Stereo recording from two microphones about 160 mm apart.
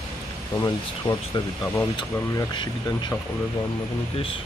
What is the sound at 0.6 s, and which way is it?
Speech, 25° left (ahead or behind).